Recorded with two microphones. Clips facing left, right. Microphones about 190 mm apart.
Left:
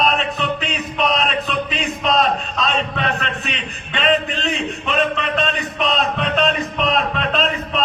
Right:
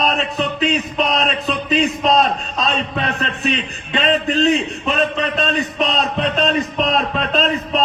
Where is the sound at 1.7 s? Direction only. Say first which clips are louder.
Right 5 dB; 35° right (ahead or behind).